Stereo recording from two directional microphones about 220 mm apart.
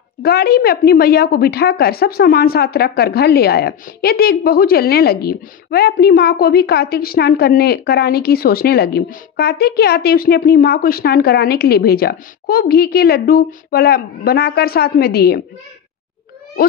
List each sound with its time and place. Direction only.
0.2 s a woman's voice: 45° left (ahead or behind)